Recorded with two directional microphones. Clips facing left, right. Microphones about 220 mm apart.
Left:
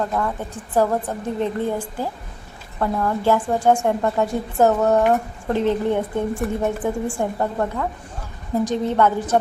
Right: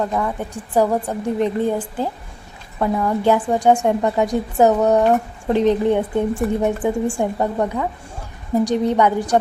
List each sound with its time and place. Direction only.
0.0 s a woman's voice: 10° right (ahead or behind)